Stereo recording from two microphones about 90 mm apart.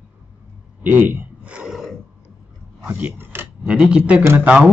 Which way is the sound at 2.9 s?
20° right (ahead or behind).